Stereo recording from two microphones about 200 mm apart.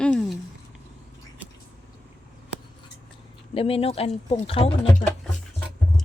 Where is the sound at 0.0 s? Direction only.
5° left (ahead or behind).